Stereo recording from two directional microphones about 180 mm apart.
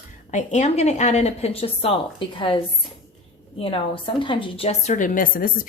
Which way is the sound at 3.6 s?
30° left (ahead or behind).